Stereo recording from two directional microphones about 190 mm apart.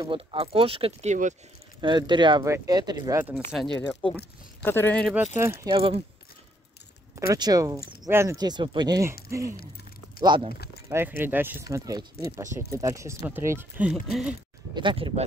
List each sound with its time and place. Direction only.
0.0 s speech: 25° right (ahead or behind)
1.8 s speech: 25° right (ahead or behind)
3.9 s speech: 5° left (ahead or behind)
5.1 s speech: 10° right (ahead or behind)
7.2 s speech: 20° right (ahead or behind)
10.5 s speech: 55° left (ahead or behind)
10.9 s speech: 10° right (ahead or behind)
14.7 s speech: 25° right (ahead or behind)